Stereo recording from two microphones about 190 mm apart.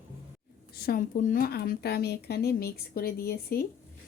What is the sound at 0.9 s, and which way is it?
Speech, 45° left (ahead or behind).